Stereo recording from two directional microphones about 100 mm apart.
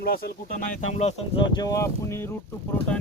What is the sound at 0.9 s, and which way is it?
Speech, 90° left.